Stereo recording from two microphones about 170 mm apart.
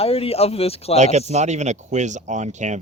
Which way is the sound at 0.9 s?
45° right (ahead or behind).